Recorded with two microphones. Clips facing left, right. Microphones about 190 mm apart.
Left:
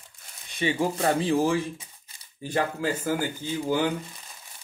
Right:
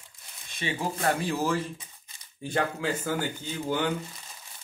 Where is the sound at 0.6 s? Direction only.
25° left (ahead or behind).